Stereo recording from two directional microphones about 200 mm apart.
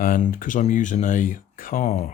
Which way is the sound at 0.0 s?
45° left (ahead or behind).